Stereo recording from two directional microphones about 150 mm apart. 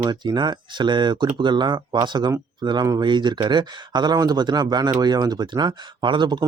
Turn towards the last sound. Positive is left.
turn(degrees=-30)  # may be behind; listen again after turning